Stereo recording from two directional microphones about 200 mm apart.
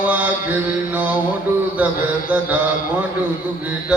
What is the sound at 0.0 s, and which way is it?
Mantra, 5° right (ahead or behind).